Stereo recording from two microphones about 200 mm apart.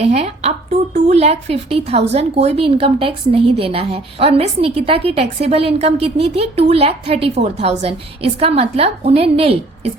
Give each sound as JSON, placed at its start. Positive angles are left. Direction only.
{"t": 0.0, "sound": "a woman's voice", "side_deg": -30}